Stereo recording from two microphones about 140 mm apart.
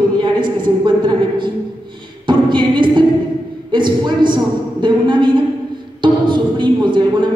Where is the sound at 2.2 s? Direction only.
30° right (ahead or behind).